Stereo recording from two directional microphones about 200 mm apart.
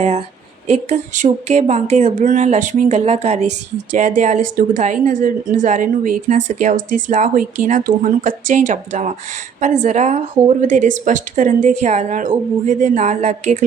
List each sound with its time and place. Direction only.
0.7 s a woman's voice: 35° right (ahead or behind)